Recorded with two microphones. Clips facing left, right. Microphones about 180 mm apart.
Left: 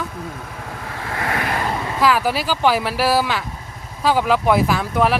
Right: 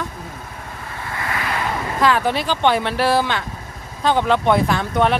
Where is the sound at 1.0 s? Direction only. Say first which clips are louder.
Left 2 dB; 65° left (ahead or behind).